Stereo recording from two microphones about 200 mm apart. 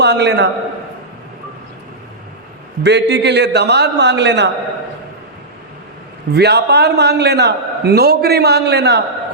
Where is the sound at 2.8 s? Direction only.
60° right (ahead or behind).